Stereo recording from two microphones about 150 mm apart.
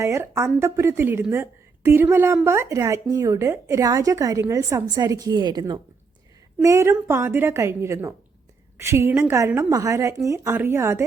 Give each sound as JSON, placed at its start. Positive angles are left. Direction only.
{"t": 0.0, "sound": "a woman's voice", "side_deg": -20}